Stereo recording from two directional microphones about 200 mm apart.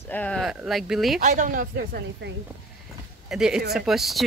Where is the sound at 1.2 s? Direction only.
40° right (ahead or behind).